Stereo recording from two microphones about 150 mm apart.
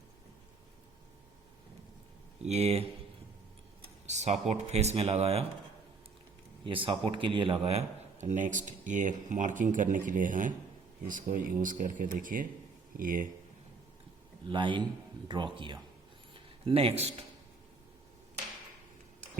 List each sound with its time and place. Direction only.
2.4 s speech: 45° right (ahead or behind)
4.0 s speech: 50° right (ahead or behind)
6.7 s speech: 35° right (ahead or behind); by 13.2 s 65° right (ahead or behind)
14.5 s a man's voice: 30° right (ahead or behind)
16.3 s a sound: 40° right (ahead or behind)